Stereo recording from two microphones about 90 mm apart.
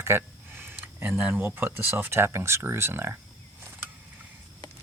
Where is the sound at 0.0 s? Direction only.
25° right (ahead or behind).